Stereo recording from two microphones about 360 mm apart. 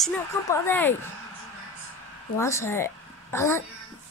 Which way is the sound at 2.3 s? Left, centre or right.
Centre.